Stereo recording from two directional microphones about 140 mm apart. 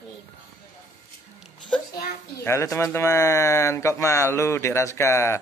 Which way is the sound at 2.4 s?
20° left (ahead or behind).